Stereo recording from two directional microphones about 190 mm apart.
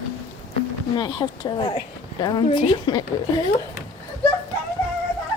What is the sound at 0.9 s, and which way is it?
Speech, 20° left (ahead or behind).